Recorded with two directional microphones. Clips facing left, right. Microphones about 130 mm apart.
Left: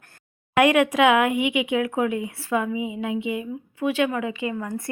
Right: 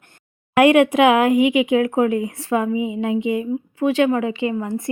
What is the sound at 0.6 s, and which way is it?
A woman's voice, 30° right (ahead or behind).